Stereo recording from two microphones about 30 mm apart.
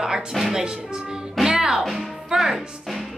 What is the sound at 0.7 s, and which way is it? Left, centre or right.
Music, right.